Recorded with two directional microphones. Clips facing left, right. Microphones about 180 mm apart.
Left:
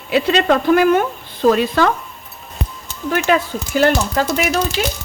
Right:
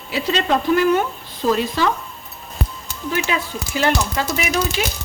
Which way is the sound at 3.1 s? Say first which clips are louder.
Left 6 dB; 50° left (ahead or behind).